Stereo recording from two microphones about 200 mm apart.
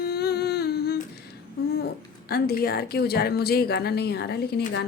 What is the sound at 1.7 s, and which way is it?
A woman's voice, 50° left (ahead or behind).